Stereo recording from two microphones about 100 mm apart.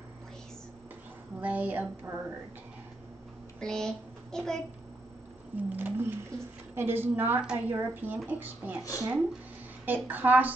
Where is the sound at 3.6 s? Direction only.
5° left (ahead or behind).